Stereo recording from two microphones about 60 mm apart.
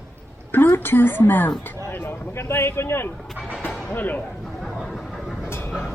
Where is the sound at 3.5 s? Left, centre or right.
Left.